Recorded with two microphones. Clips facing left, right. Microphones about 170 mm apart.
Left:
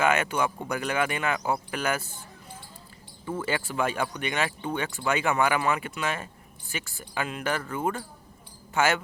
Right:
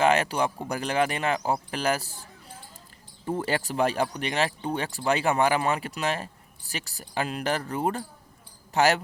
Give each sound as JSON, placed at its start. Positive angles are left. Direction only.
{"t": 0.0, "sound": "speech", "side_deg": -35}
{"t": 3.2, "sound": "speech", "side_deg": -40}